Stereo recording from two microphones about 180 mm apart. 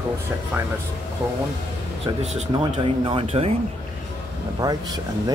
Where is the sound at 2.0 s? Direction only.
40° right (ahead or behind).